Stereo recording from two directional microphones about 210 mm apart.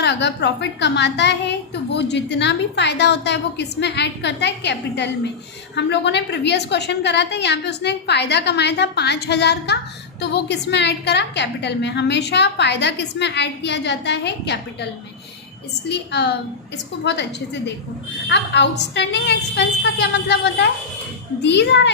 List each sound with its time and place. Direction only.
0.0 s a woman's voice: 55° left (ahead or behind)
15.9 s a woman's voice: 50° left (ahead or behind)